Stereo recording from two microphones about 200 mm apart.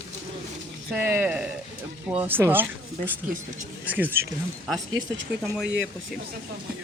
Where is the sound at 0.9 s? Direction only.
10° right (ahead or behind).